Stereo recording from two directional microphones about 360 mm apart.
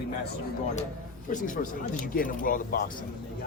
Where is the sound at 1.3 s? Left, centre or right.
Left.